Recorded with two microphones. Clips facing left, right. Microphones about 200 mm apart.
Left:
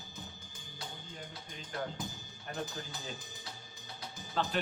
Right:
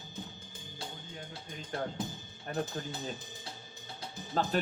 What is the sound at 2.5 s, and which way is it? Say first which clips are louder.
Speech: right 6 dB; 45° right (ahead or behind).